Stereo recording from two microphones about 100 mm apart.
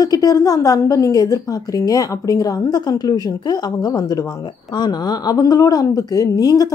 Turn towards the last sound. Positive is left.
turn(degrees=40)  # may be behind; listen again after turning